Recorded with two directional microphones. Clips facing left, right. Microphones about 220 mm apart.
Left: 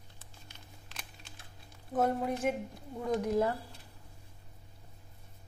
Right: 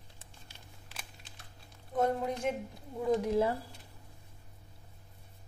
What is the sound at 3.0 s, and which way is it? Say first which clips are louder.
Speech: right 1 dB; 5° right (ahead or behind).